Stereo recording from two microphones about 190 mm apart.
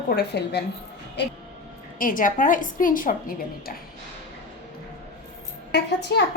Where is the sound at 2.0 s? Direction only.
45° left (ahead or behind).